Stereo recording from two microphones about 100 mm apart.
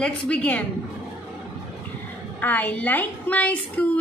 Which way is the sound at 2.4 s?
20° left (ahead or behind).